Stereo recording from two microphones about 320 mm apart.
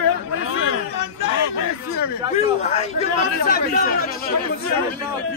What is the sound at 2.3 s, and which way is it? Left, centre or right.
A man's voice, left.